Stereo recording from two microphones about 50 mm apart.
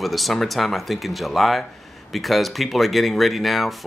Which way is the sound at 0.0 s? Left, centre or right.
Centre.